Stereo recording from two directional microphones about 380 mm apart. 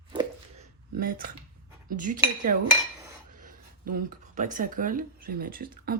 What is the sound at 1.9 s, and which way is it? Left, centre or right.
Speech, right.